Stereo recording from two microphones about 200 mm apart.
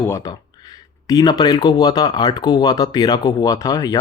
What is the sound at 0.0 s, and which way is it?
Speech, 15° left (ahead or behind).